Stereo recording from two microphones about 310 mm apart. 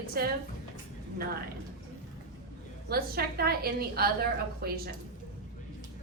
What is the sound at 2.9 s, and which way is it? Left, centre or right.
A woman's voice, right.